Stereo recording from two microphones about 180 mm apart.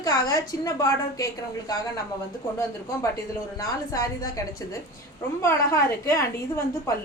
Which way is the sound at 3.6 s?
20° left (ahead or behind).